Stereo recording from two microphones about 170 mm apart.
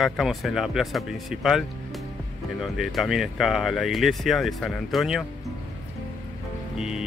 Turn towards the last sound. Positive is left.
turn(degrees=-5)  # may be behind; listen again after turning